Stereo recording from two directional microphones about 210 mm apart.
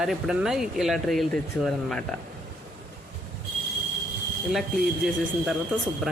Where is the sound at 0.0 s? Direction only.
Centre (ahead or behind).